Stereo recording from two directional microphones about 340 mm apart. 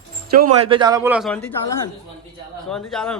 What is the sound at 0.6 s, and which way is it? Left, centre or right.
Speech, centre.